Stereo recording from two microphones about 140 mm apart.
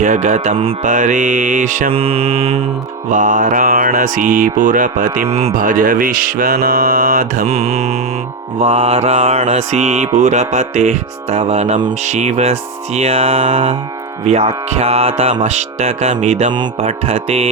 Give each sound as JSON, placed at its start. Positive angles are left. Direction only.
{"t": 0.0, "sound": "music", "side_deg": -60}
{"t": 0.5, "sound": "mantra", "side_deg": -40}
{"t": 0.8, "sound": "music", "side_deg": -65}
{"t": 1.9, "sound": "speech", "side_deg": -45}
{"t": 3.1, "sound": "mantra", "side_deg": -65}
{"t": 5.5, "sound": "music", "side_deg": -75}
{"t": 7.4, "sound": "speech", "side_deg": -50}
{"t": 10.2, "sound": "music", "side_deg": -60}
{"t": 12.0, "sound": "speech", "side_deg": -55}